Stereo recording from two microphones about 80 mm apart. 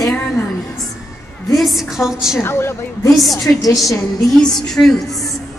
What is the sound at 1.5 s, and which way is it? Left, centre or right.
Speech, centre.